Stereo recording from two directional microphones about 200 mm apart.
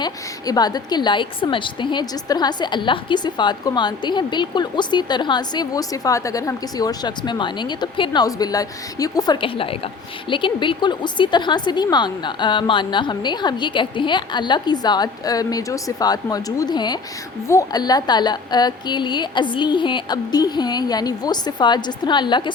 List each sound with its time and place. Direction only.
0.0 s a woman's voice: 20° left (ahead or behind)